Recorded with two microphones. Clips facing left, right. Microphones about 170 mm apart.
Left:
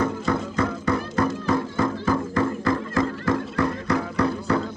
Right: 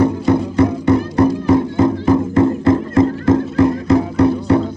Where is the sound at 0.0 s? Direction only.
20° right (ahead or behind).